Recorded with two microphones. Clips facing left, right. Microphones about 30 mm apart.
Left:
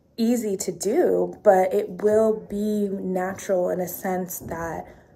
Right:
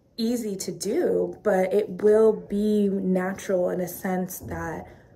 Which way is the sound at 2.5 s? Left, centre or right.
Right.